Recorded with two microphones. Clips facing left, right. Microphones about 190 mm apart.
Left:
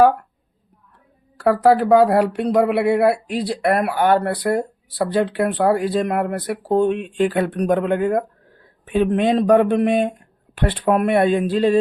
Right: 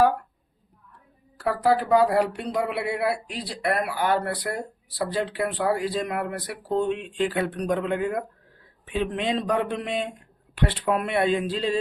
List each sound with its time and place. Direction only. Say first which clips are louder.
1.5 s speech: left 7 dB; 60° left (ahead or behind)